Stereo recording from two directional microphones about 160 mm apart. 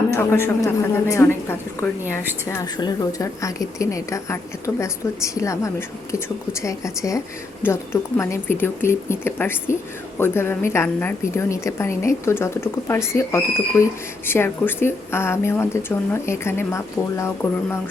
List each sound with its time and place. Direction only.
0.1 s a woman's voice: 15° left (ahead or behind)